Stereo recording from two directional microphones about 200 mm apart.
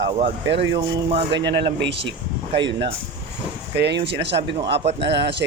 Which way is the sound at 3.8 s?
55° right (ahead or behind).